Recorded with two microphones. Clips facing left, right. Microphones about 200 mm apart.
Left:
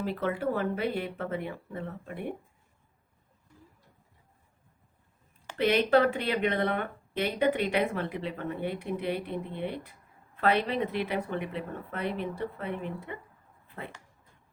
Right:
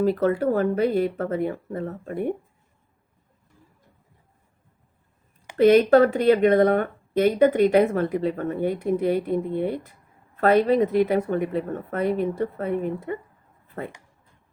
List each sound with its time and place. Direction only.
0.0 s speech: 40° right (ahead or behind)
5.5 s speech: 45° right (ahead or behind)